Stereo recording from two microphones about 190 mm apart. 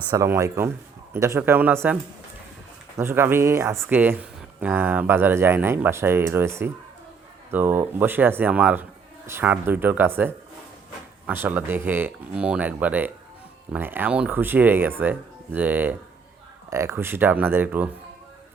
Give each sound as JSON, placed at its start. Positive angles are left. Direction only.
{"t": 0.1, "sound": "speech", "side_deg": -15}
{"t": 3.0, "sound": "speech", "side_deg": -10}